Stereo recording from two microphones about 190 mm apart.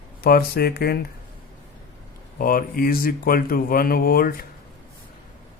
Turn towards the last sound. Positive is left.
turn(degrees=50)  # may be behind; listen again after turning